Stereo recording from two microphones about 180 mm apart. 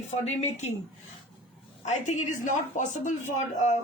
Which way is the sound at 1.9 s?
45° left (ahead or behind).